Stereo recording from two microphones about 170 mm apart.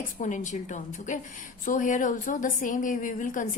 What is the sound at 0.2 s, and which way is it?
A woman's voice, 45° left (ahead or behind).